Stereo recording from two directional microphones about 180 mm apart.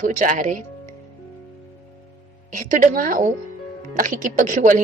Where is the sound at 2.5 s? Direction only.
45° right (ahead or behind).